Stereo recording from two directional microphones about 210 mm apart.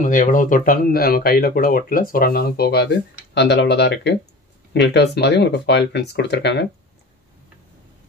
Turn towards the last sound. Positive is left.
turn(degrees=55)  # may be behind; listen again after turning